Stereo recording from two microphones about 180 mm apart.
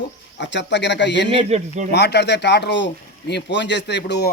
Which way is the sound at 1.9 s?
70° left (ahead or behind).